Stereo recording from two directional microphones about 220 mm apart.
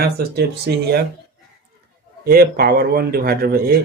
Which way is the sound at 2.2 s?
45° right (ahead or behind).